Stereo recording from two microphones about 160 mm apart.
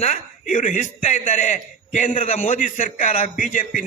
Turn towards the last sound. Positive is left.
turn(degrees=55)  # may be behind; listen again after turning